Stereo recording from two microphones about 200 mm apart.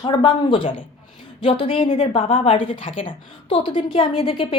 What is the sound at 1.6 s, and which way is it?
Speech, 35° left (ahead or behind).